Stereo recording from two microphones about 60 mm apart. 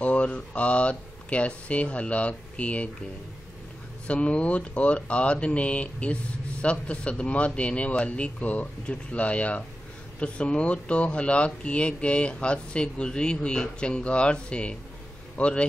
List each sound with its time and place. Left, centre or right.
0.0 s speech: centre
4.1 s speech: left